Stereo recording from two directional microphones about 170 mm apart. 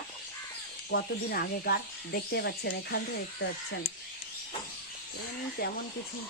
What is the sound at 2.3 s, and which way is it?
Speech, 75° left (ahead or behind).